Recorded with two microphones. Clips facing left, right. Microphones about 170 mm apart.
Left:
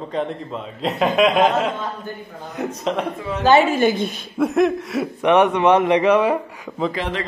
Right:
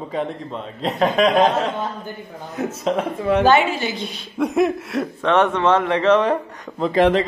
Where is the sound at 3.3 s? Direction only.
60° right (ahead or behind).